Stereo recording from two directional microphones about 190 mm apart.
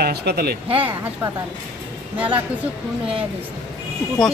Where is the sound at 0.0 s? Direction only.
60° right (ahead or behind).